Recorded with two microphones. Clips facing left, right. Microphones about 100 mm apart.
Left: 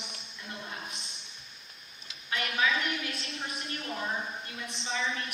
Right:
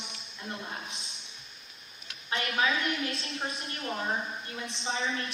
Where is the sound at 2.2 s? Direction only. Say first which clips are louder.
Right 1 dB; 30° right (ahead or behind).